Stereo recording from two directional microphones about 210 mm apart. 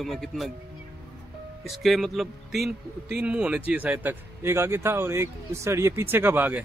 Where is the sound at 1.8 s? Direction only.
Centre (ahead or behind).